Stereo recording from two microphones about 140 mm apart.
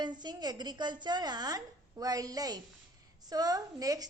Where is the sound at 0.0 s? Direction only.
30° right (ahead or behind).